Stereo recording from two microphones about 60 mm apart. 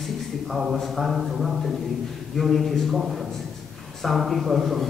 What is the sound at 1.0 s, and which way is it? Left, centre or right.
A man's voice, centre.